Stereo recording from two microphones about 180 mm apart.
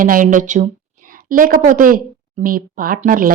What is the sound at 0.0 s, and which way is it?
A woman's voice, 50° right (ahead or behind).